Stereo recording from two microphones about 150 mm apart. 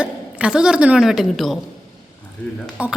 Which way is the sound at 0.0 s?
5° right (ahead or behind).